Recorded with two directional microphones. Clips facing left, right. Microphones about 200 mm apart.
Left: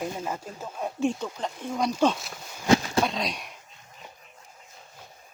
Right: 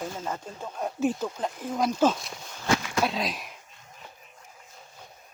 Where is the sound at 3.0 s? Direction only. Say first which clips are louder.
Left 1 dB; 5° right (ahead or behind).